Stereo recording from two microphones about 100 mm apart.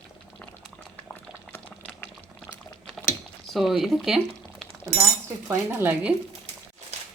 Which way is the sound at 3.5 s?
Centre (ahead or behind).